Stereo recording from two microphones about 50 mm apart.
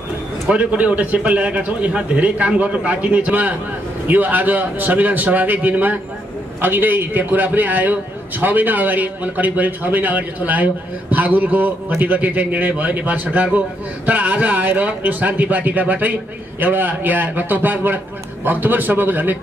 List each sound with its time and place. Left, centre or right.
0.5 s a man's voice: right